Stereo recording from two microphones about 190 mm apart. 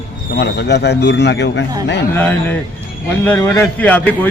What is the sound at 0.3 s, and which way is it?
Speech, 60° left (ahead or behind).